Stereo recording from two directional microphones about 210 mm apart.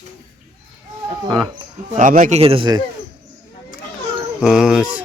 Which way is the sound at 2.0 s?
40° right (ahead or behind).